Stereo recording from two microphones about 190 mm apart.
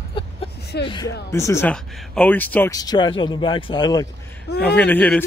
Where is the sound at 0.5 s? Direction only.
60° left (ahead or behind).